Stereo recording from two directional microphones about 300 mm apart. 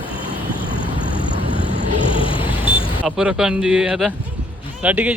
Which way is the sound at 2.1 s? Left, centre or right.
Centre.